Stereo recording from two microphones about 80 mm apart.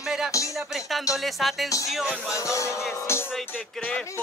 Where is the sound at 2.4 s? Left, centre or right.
Left.